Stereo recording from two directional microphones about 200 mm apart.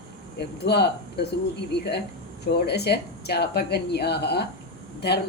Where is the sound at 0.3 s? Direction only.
55° left (ahead or behind).